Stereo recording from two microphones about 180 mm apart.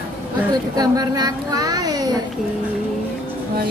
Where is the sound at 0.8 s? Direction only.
20° right (ahead or behind).